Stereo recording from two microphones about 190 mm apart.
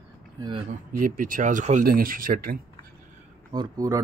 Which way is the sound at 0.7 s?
45° right (ahead or behind).